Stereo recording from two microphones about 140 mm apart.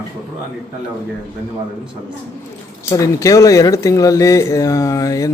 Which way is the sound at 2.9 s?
25° left (ahead or behind).